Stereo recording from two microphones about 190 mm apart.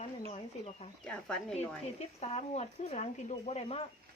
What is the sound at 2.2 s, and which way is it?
Speech, 35° left (ahead or behind).